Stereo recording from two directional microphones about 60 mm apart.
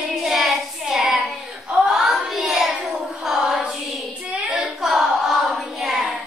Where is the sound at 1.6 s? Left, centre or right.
Centre.